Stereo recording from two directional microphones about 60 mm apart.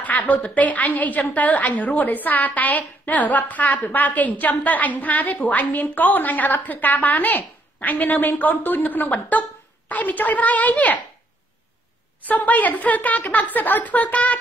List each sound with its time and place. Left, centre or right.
0.0 s a woman's voice: left
12.3 s a woman's voice: left